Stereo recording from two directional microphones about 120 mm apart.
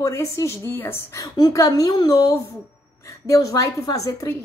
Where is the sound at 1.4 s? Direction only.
30° left (ahead or behind).